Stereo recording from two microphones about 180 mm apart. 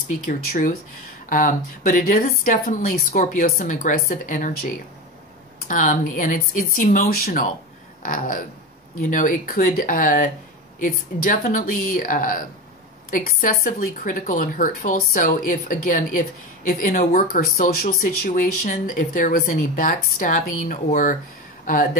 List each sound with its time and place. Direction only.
0.3 s speech: 45° left (ahead or behind)